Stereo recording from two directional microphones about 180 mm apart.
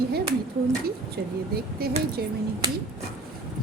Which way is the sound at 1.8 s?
60° right (ahead or behind).